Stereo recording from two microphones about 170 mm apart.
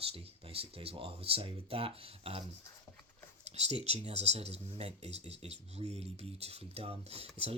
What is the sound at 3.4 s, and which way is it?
Speech, 40° right (ahead or behind).